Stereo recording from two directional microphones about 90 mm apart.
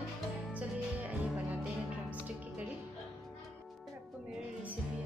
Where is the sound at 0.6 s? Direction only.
15° right (ahead or behind).